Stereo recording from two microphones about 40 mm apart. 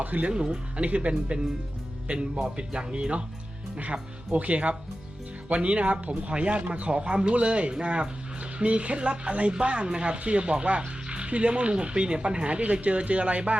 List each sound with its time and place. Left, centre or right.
0.0 s speech: right
0.3 s speech: right
0.8 s speech: right
4.3 s speech: right
6.9 s speech: right